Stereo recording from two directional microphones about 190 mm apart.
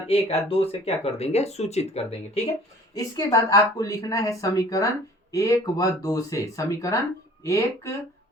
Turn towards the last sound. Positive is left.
turn(degrees=15)  # may be behind; listen again after turning